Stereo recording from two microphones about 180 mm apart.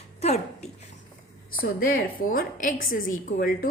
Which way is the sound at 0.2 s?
35° left (ahead or behind).